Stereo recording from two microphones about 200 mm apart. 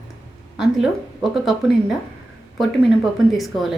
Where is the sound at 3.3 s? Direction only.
Centre (ahead or behind).